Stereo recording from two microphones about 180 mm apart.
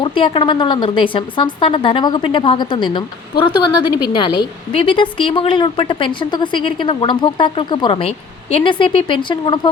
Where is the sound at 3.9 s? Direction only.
25° left (ahead or behind).